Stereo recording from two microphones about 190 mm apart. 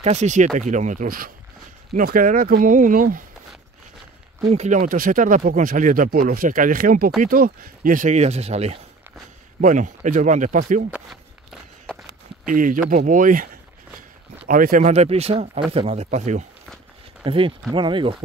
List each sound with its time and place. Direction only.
0.0 s speech: 35° right (ahead or behind)
4.5 s speech: 40° right (ahead or behind)
12.4 s speech: 45° right (ahead or behind)
14.5 s speech: 45° right (ahead or behind)
17.2 s speech: 30° right (ahead or behind)